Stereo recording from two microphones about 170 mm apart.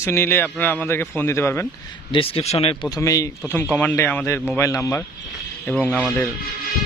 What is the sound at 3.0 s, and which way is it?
A man's voice, 20° left (ahead or behind).